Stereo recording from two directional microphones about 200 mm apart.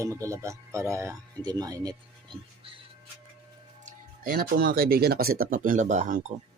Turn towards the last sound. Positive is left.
turn(degrees=-40)  # may be behind; listen again after turning